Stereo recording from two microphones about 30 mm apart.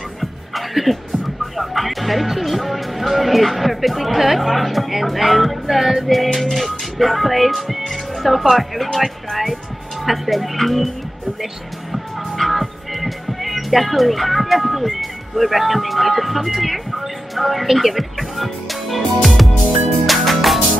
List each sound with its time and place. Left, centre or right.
0.2 s music: centre
1.4 s speech: centre
6.1 s speech: centre
10.0 s speech: centre
12.4 s speech: centre
20.1 s music: centre